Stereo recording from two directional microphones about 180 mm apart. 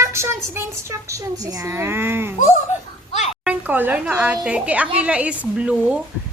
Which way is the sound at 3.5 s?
10° right (ahead or behind).